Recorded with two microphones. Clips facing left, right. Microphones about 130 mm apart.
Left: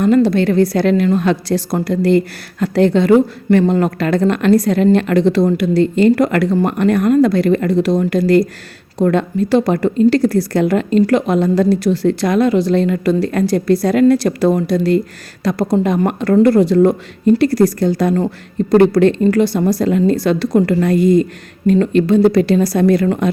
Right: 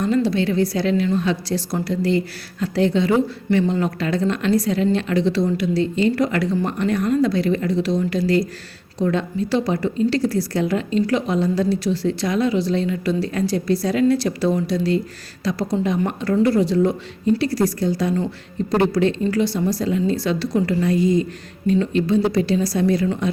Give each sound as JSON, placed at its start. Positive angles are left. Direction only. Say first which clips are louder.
{"t": 0.0, "sound": "a woman's voice", "louder": "left 7 dB", "side_deg": 55}